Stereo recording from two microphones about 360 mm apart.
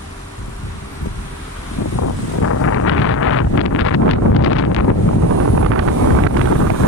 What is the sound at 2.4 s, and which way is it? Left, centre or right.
Wind noise, left.